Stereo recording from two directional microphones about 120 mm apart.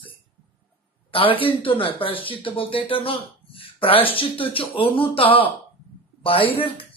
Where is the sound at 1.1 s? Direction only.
50° left (ahead or behind).